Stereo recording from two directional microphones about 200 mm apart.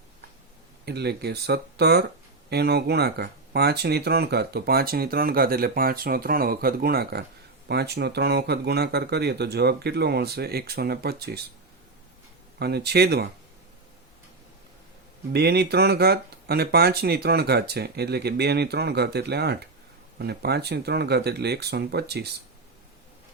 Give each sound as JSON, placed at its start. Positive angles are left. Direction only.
{"t": 0.9, "sound": "speech", "side_deg": -55}
{"t": 12.5, "sound": "speech", "side_deg": -55}
{"t": 15.3, "sound": "speech", "side_deg": -55}